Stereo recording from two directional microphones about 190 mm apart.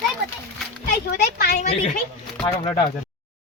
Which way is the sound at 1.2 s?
55° left (ahead or behind).